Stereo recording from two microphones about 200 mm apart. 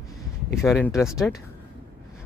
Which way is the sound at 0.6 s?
Centre (ahead or behind).